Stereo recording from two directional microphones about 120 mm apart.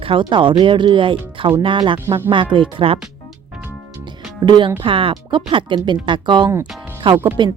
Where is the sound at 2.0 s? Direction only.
20° right (ahead or behind).